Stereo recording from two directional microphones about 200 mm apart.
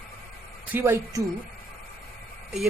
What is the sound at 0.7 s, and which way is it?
Speech, 15° right (ahead or behind).